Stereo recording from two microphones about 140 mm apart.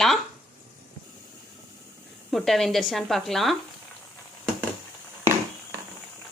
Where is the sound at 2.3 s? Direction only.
Centre (ahead or behind).